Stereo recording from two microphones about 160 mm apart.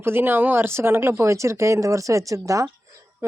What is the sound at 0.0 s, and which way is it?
Speech, 15° right (ahead or behind).